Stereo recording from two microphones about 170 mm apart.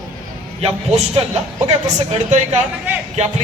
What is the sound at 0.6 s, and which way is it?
A man's voice, 40° right (ahead or behind).